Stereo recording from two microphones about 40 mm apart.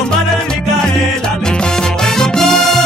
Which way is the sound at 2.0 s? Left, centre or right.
Centre.